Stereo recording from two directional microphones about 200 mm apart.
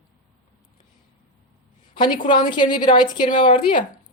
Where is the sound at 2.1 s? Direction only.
40° left (ahead or behind).